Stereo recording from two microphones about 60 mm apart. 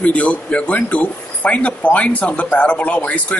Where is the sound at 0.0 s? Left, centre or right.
Left.